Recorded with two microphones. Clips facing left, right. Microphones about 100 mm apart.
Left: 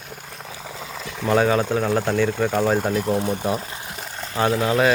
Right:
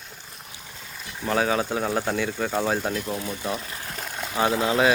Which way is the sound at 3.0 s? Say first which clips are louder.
Left 8 dB; 40° left (ahead or behind).